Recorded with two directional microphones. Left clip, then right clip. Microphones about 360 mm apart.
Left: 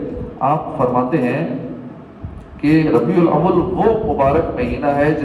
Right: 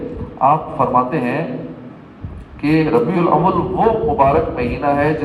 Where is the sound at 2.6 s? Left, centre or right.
Centre.